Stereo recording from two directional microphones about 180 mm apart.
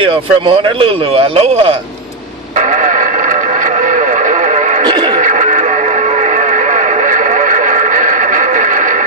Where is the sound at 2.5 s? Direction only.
45° right (ahead or behind).